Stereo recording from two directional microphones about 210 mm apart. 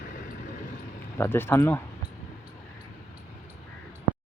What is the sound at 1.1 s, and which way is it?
Speech, 10° left (ahead or behind).